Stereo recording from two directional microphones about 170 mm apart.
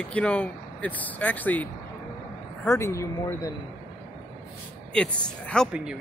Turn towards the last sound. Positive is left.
turn(degrees=5)  # may be behind; listen again after turning